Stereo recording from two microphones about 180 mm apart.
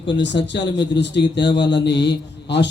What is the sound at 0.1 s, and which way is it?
A man's voice, 80° left.